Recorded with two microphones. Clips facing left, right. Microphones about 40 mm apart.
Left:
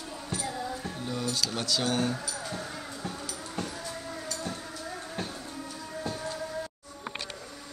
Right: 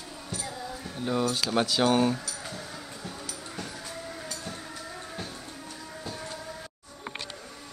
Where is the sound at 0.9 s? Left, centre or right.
Right.